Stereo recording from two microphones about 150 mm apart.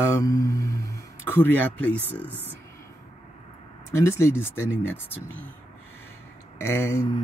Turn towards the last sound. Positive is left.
turn(degrees=15)  # may be behind; listen again after turning